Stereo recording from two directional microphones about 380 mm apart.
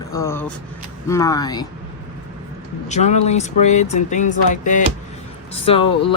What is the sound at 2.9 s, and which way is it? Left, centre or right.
Speech, centre.